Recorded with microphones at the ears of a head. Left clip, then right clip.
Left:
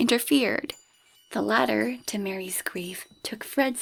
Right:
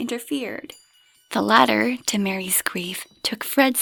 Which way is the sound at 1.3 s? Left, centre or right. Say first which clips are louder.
Right 7 dB; right.